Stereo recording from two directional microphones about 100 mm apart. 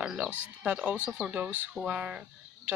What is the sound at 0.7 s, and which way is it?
Speech, 15° right (ahead or behind).